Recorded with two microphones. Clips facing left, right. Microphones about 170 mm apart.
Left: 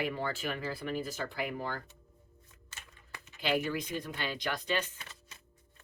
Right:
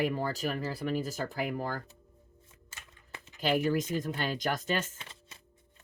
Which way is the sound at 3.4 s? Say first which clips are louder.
Right 4 dB; 45° right (ahead or behind).